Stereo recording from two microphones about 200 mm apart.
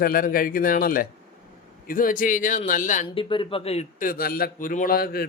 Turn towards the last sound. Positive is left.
turn(degrees=50)  # may be behind; listen again after turning